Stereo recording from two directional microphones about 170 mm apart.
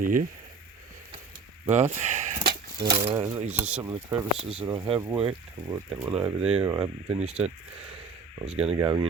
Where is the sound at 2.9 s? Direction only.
25° right (ahead or behind).